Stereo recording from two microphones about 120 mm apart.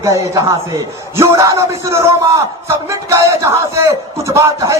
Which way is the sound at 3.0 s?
25° right (ahead or behind).